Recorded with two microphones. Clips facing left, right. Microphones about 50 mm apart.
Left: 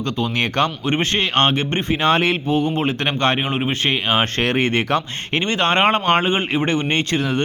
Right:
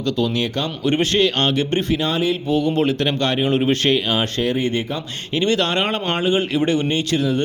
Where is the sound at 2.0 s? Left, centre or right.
Left.